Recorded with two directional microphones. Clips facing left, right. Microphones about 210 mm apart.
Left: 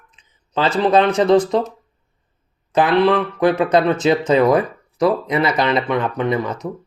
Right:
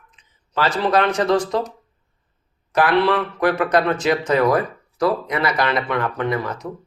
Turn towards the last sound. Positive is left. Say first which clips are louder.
# left 3 dB
turn(degrees=20)  # may be behind; listen again after turning